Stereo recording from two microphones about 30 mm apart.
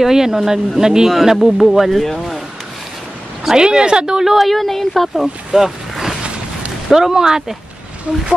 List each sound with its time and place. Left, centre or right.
0.0 s speech: centre
1.3 s speech: centre
1.9 s speech: centre
3.5 s a woman's voice: right
4.4 s speech: centre
5.2 s a woman's voice: centre